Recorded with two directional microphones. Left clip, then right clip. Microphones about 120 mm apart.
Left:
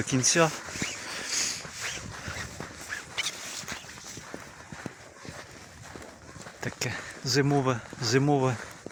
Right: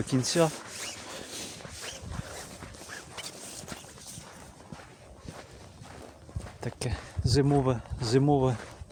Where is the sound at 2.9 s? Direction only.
55° right (ahead or behind).